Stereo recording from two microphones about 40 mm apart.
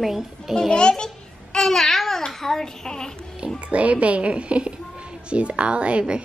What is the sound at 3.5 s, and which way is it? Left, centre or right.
A woman's voice, right.